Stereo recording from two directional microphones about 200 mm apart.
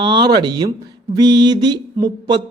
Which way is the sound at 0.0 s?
25° right (ahead or behind).